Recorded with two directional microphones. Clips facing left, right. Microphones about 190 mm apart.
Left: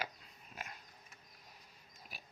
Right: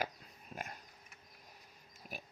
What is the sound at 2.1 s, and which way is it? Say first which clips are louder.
Pig: right 9 dB; 50° right (ahead or behind).